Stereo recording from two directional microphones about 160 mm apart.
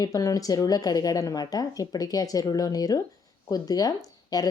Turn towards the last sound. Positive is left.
turn(degrees=25)  # may be behind; listen again after turning